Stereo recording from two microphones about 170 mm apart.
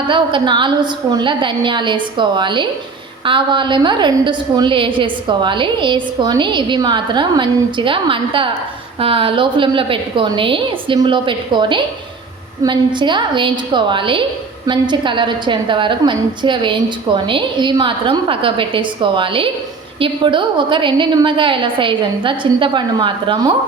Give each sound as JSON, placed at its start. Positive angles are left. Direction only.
{"t": 0.1, "sound": "a woman's voice", "side_deg": -30}